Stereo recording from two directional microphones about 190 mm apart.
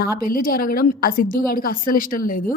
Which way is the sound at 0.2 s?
50° left (ahead or behind).